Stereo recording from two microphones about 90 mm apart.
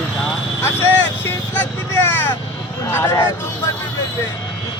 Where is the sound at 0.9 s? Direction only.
20° left (ahead or behind).